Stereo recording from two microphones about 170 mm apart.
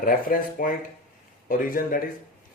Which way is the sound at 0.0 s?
55° left (ahead or behind).